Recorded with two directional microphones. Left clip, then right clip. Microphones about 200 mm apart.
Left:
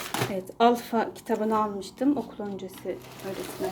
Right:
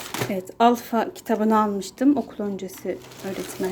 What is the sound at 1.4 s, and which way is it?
Speech, 30° right (ahead or behind).